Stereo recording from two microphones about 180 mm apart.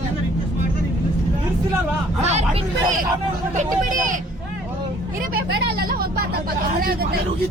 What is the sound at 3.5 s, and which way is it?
Speech, 45° right (ahead or behind).